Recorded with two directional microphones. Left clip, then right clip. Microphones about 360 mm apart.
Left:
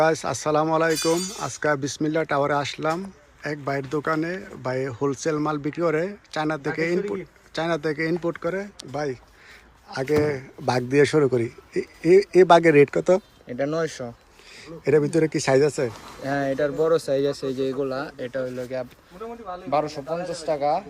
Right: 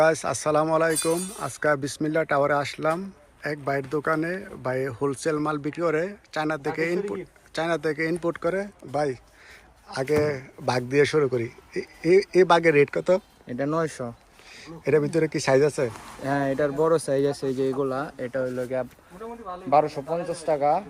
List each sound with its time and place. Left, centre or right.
0.0 s speech: centre
13.5 s speech: centre
14.6 s speech: centre
16.2 s speech: centre